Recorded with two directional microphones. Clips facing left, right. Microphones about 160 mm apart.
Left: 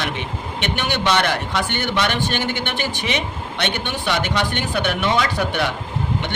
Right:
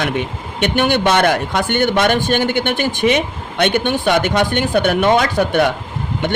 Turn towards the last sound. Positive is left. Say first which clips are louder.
# right 5 dB
turn(degrees=-50)  # may be behind; listen again after turning